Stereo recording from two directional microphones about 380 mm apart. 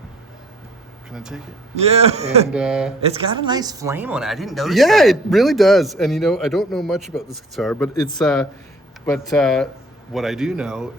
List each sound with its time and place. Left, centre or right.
1.1 s speech: centre
1.8 s speech: centre
2.5 s speech: centre
3.0 s speech: centre